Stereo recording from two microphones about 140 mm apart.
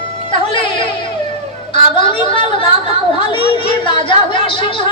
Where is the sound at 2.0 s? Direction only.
35° left (ahead or behind).